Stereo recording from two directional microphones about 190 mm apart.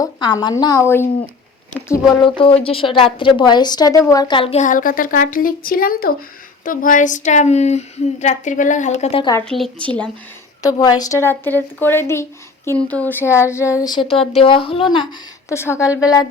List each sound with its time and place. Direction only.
0.0 s a woman's voice: 20° left (ahead or behind)
2.2 s a woman's voice: 30° left (ahead or behind)
9.4 s speech: 5° left (ahead or behind)
10.8 s a woman's voice: 20° left (ahead or behind)
15.4 s a woman's voice: 15° left (ahead or behind)